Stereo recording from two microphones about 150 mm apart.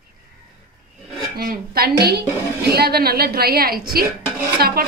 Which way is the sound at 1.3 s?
90° right.